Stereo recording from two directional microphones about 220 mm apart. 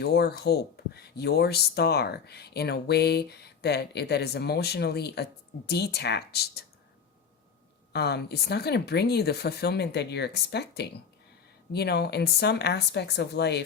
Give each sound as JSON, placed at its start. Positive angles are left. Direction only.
{"t": 0.0, "sound": "speech", "side_deg": 50}
{"t": 7.9, "sound": "speech", "side_deg": 50}